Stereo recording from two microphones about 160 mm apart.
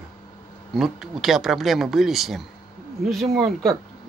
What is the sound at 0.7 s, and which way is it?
Speech, centre (ahead or behind).